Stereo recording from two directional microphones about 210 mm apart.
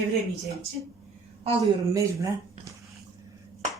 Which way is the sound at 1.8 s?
15° right (ahead or behind).